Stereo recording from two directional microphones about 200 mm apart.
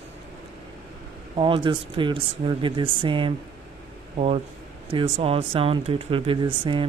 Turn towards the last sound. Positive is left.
turn(degrees=-25)  # may be behind; listen again after turning